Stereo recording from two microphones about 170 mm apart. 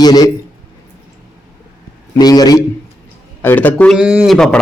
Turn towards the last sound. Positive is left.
turn(degrees=0)  # may be behind; listen again after turning